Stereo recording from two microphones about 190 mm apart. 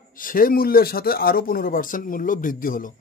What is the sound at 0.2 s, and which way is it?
Speech, 50° left (ahead or behind).